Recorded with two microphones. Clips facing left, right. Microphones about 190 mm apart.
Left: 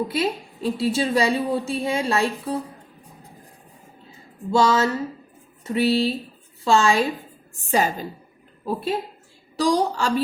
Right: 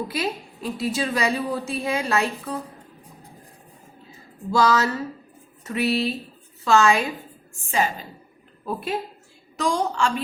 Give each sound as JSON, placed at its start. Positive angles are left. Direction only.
{"t": 0.1, "sound": "a woman's voice", "side_deg": 30}
{"t": 4.5, "sound": "a woman's voice", "side_deg": 25}